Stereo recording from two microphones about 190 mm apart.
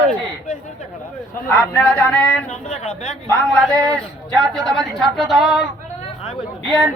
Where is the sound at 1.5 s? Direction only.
5° left (ahead or behind).